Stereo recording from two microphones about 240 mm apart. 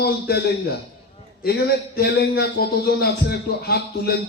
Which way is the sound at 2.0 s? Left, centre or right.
Left.